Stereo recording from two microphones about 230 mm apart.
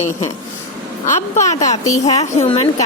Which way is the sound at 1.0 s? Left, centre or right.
Left.